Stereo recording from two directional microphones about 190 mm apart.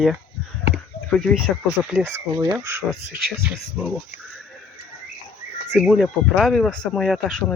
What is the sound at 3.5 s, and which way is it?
Speech, 5° right (ahead or behind).